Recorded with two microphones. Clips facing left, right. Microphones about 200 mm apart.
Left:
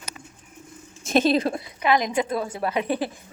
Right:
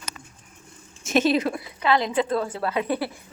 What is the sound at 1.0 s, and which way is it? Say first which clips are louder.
Speech: left 1 dB; 35° left (ahead or behind).